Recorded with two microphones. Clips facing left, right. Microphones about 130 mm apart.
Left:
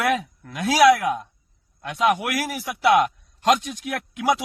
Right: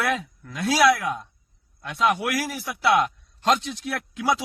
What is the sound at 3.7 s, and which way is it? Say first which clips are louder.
Speech: left 1 dB; 50° left (ahead or behind).